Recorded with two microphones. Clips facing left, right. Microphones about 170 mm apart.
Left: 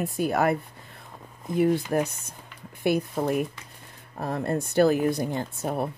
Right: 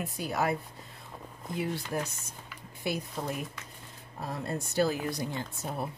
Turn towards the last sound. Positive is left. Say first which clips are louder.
# left 7 dB
turn(degrees=55)  # may be behind; listen again after turning